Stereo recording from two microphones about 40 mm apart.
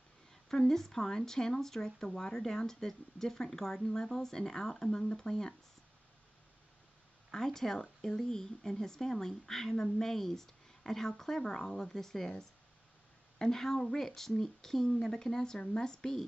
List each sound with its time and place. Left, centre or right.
0.3 s speech: centre
7.2 s speech: centre
13.4 s speech: centre